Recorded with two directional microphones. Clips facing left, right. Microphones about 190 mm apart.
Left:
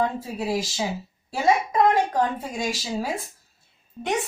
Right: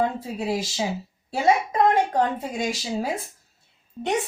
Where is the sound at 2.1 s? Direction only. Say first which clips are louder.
Right 1 dB; 20° right (ahead or behind).